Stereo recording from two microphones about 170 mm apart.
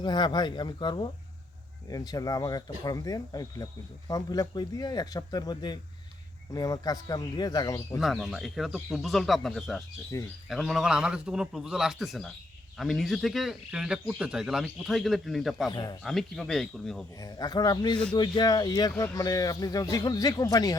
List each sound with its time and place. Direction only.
0.0 s speech: 25° left (ahead or behind)
7.9 s speech: centre (ahead or behind)
10.1 s speech: 20° left (ahead or behind)
10.5 s speech: centre (ahead or behind)
15.7 s speech: 25° left (ahead or behind)
16.0 s speech: centre (ahead or behind)
17.2 s speech: 20° left (ahead or behind)